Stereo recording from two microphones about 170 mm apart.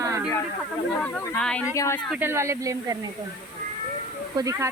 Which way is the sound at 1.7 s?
20° left (ahead or behind).